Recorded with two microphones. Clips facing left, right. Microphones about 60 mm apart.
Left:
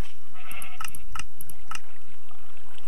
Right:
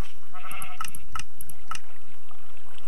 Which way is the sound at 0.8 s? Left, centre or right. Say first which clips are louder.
Right 1 dB; left.